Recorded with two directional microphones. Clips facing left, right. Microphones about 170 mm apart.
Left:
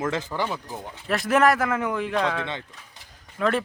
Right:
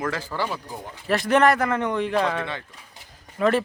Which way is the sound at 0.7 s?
Centre (ahead or behind).